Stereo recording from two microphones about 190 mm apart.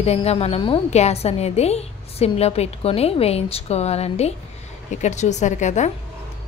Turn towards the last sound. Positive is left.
turn(degrees=40)  # may be behind; listen again after turning